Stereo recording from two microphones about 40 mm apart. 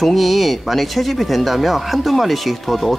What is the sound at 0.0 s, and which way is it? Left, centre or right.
Speech, centre.